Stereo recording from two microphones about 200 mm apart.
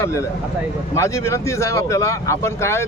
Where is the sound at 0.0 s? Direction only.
15° left (ahead or behind).